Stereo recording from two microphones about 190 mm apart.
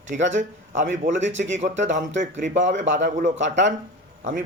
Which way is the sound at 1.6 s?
75° right (ahead or behind).